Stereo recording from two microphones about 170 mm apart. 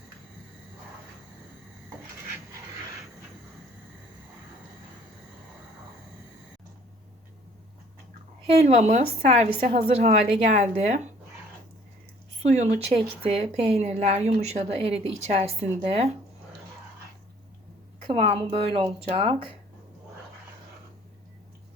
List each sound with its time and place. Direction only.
8.4 s a woman's voice: 40° right (ahead or behind)
12.4 s speech: 40° right (ahead or behind)
18.0 s speech: 35° right (ahead or behind)